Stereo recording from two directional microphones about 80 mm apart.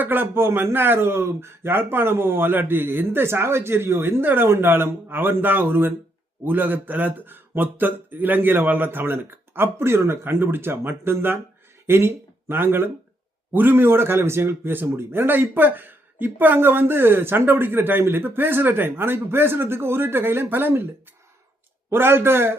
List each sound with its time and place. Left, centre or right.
0.0 s a man's voice: right
21.8 s a man's voice: right